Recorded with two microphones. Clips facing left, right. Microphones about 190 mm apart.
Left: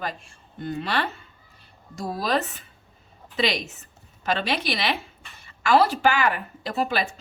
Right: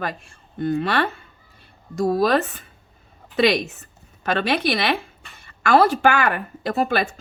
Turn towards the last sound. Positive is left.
turn(degrees=-50)  # may be behind; listen again after turning